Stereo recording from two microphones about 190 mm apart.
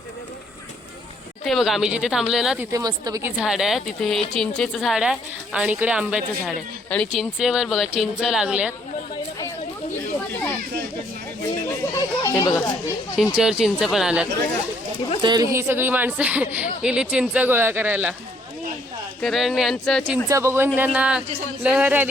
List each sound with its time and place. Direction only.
1.5 s speech: centre (ahead or behind)
2.7 s a woman's voice: 20° right (ahead or behind)
3.4 s speech: centre (ahead or behind)
11.9 s chatter: 20° left (ahead or behind)
13.1 s speech: 5° right (ahead or behind)
15.2 s a woman's voice: 20° right (ahead or behind)
19.2 s speech: centre (ahead or behind)
20.2 s a woman's voice: 15° right (ahead or behind)